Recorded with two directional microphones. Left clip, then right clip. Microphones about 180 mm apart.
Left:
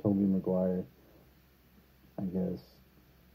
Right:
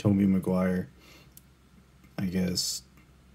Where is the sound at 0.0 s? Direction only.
25° right (ahead or behind).